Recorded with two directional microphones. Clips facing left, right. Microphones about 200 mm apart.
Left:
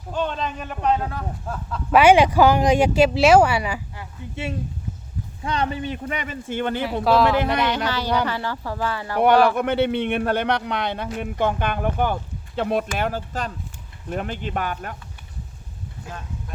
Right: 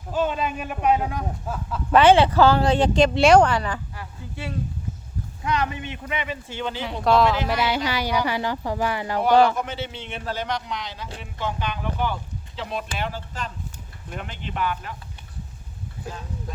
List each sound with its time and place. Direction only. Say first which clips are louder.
0.1 s speech: right 2 dB; 5° right (ahead or behind)
1.9 s speech: left 1 dB; 10° left (ahead or behind)
3.9 s speech: left 3 dB; 25° left (ahead or behind); by 6.8 s 55° left (ahead or behind)
6.8 s speech: even; 5° left (ahead or behind); by 9.1 s 15° right (ahead or behind)
9.1 s a man's voice: left 2 dB; 60° left (ahead or behind)